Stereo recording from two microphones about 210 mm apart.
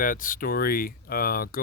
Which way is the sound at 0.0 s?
40° left (ahead or behind).